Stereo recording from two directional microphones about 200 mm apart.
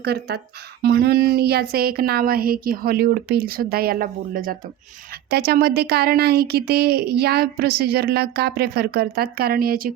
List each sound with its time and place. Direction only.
0.0 s speech: 55° right (ahead or behind)